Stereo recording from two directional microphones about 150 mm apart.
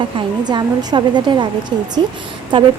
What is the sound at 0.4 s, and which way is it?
A woman's voice, 25° right (ahead or behind).